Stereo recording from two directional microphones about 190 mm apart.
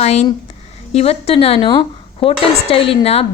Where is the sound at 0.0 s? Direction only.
35° left (ahead or behind).